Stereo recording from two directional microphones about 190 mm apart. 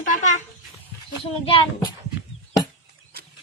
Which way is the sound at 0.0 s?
45° left (ahead or behind).